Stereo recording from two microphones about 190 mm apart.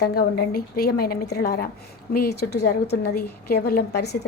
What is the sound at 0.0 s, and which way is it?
A woman's voice, 55° left (ahead or behind).